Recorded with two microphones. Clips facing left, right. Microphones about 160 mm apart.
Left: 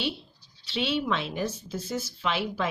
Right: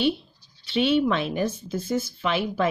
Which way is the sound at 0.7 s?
55° right (ahead or behind).